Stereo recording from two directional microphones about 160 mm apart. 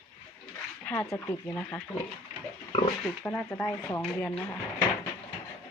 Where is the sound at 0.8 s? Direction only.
10° left (ahead or behind).